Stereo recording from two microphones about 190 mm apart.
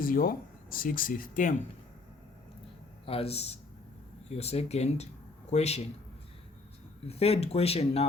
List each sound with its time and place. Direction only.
0.0 s speech: 50° left (ahead or behind)
3.1 s speech: 30° left (ahead or behind)
7.1 s speech: 30° left (ahead or behind)